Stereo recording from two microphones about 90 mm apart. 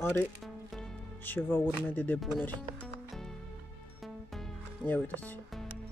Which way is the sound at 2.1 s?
Centre (ahead or behind).